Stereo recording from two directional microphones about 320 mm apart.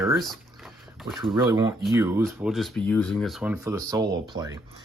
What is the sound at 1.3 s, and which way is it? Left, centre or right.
Speech, centre.